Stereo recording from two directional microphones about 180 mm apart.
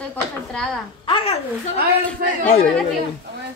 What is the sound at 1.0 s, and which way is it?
Babbling, 30° left (ahead or behind).